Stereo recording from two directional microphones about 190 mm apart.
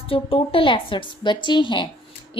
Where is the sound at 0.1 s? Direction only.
30° left (ahead or behind).